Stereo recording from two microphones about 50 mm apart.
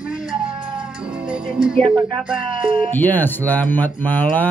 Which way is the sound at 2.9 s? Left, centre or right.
Left.